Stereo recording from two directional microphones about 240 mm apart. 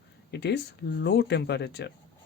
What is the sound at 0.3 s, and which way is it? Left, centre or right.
Speech, left.